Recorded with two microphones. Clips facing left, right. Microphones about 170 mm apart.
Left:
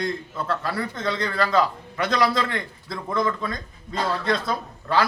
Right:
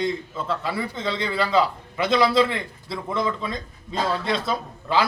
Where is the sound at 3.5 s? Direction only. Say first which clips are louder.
Right 1 dB; 25° right (ahead or behind).